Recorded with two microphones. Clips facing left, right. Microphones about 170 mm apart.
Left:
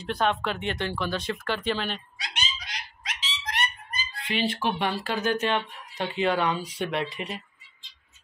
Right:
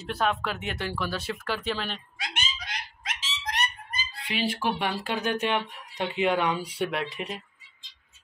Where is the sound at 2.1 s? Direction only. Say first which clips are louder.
Right 1 dB; 55° right (ahead or behind).